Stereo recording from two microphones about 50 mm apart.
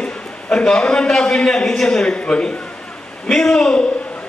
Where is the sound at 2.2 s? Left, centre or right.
Left.